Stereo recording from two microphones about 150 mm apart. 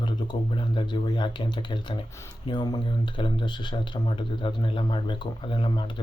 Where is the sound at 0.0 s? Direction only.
30° left (ahead or behind).